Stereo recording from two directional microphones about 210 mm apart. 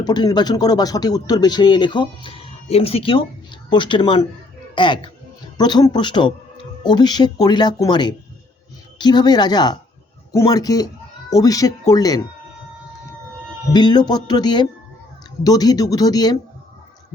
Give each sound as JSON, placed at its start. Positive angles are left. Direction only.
{"t": 0.0, "sound": "speech", "side_deg": 20}
{"t": 13.7, "sound": "speech", "side_deg": 20}